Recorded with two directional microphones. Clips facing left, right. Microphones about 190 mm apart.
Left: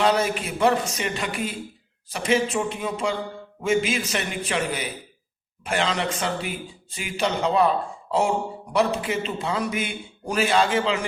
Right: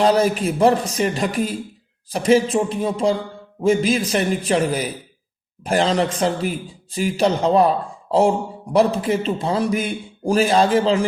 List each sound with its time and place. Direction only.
0.0 s a man's voice: 35° right (ahead or behind)
8.7 s a man's voice: 35° right (ahead or behind)